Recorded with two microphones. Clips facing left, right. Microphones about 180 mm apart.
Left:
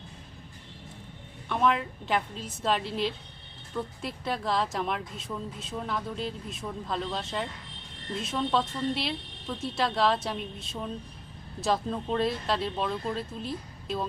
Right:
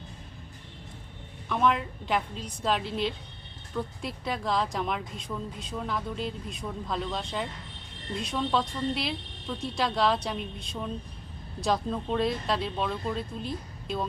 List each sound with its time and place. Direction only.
1.5 s speech: centre (ahead or behind)